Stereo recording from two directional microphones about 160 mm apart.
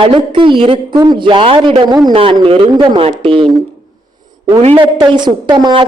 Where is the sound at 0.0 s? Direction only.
35° right (ahead or behind).